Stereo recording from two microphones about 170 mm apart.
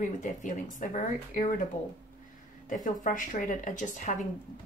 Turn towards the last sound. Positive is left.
turn(degrees=50)  # may be behind; listen again after turning